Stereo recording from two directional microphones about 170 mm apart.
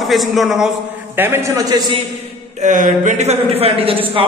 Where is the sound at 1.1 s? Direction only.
15° right (ahead or behind).